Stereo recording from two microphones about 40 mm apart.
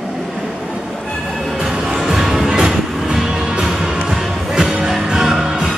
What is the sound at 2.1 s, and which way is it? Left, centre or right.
Music, centre.